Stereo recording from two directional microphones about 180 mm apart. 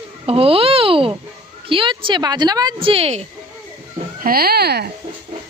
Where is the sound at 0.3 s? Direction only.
30° right (ahead or behind).